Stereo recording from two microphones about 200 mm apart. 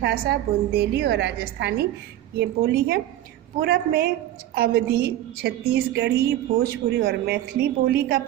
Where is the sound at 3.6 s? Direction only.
50° right (ahead or behind).